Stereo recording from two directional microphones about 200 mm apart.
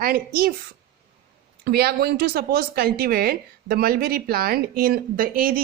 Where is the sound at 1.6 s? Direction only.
50° right (ahead or behind).